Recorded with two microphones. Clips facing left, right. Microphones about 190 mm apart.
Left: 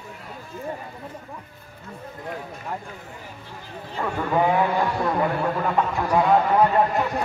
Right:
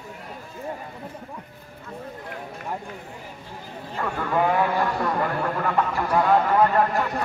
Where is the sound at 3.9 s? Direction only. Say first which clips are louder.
Left 1 dB; 5° left (ahead or behind).